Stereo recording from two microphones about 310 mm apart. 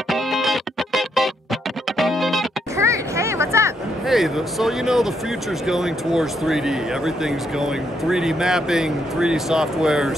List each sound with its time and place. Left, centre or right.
0.1 s music: centre
5.7 s speech: centre